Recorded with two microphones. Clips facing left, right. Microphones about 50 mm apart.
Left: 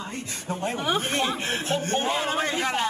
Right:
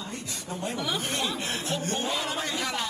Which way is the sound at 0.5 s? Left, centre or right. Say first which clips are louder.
Left 5 dB; left.